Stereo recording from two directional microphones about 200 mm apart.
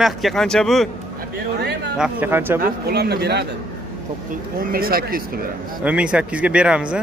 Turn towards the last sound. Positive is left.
turn(degrees=-5)  # may be behind; listen again after turning